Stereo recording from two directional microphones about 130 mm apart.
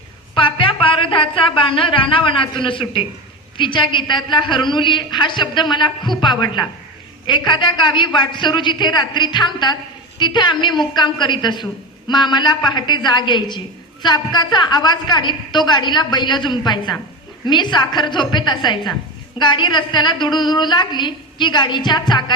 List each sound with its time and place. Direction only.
0.3 s a woman's voice: 40° left (ahead or behind)